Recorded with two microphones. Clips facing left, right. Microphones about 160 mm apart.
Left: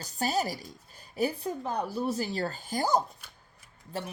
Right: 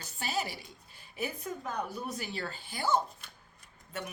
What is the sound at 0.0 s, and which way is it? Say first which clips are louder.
A woman's voice: left 6 dB; 40° left (ahead or behind).